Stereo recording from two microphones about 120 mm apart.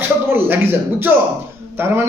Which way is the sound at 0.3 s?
20° right (ahead or behind).